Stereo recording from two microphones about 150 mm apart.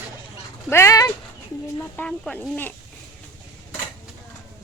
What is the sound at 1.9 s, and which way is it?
Speech, 5° left (ahead or behind).